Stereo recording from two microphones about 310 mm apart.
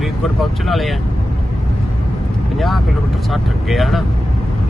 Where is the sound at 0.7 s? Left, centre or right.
Centre.